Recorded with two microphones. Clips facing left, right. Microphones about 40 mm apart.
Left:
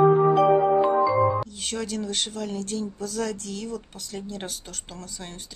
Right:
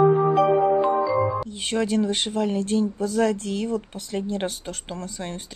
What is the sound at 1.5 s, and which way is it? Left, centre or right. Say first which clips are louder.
Speech: right 7 dB; right.